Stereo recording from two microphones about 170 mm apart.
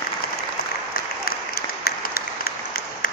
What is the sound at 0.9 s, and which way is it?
Applause, 60° left (ahead or behind).